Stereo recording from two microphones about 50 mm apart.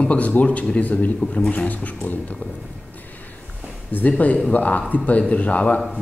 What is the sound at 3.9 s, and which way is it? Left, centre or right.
Speech, left.